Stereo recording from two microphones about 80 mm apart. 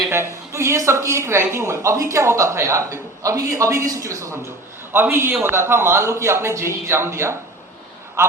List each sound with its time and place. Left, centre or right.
0.1 s speech: right
4.9 s speech: right